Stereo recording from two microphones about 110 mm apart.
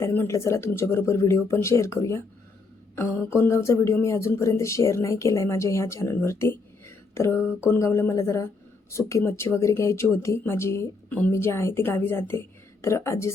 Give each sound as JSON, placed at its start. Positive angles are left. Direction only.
{"t": 0.0, "sound": "speech", "side_deg": 20}